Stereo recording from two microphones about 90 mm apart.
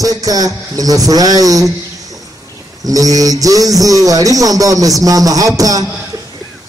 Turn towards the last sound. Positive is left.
turn(degrees=-40)  # may be behind; listen again after turning